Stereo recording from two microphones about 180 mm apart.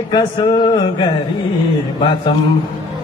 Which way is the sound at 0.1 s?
25° left (ahead or behind).